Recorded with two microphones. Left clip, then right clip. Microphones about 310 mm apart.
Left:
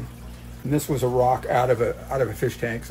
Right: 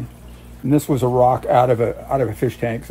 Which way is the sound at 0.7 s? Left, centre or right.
Right.